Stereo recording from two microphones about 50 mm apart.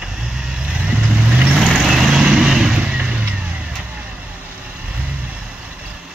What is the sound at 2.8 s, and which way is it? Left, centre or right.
Vehicle, right.